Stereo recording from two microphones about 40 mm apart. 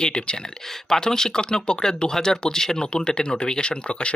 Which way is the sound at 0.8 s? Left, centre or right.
Centre.